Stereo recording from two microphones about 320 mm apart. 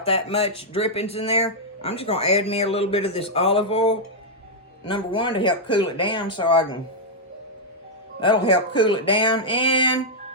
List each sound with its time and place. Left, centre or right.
0.0 s speech: centre
8.2 s speech: centre